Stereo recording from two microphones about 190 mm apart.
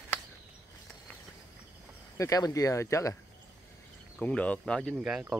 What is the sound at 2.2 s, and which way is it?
Speech, 20° left (ahead or behind).